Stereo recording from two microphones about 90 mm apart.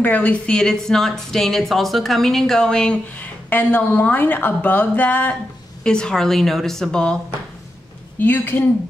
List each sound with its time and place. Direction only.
0.0 s a woman's voice: 15° left (ahead or behind)
3.4 s a woman's voice: 20° left (ahead or behind)
8.2 s a woman's voice: 20° left (ahead or behind)